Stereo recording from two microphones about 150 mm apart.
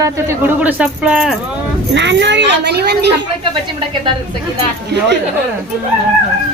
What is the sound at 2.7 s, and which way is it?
Speech, 90° right.